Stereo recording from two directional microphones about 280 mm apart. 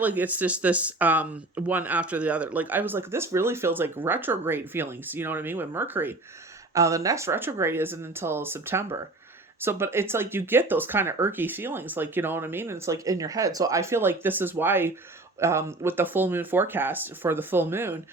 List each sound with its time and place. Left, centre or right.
0.0 s speech: centre